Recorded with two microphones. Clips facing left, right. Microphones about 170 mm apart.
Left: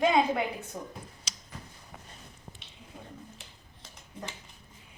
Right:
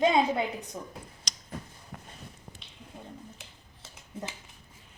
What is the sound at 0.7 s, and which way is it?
Speech, 5° left (ahead or behind).